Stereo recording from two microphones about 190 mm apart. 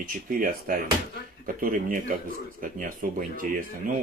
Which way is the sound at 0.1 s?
45° right (ahead or behind).